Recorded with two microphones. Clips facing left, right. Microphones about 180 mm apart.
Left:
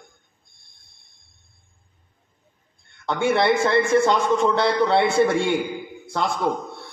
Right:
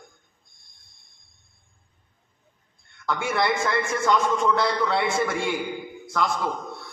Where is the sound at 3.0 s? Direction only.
30° left (ahead or behind).